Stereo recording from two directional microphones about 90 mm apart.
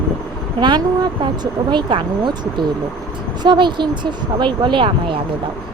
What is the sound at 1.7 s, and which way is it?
Speech, 65° right (ahead or behind).